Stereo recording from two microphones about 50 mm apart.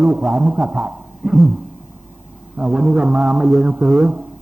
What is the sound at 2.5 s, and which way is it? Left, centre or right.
A man's voice, centre.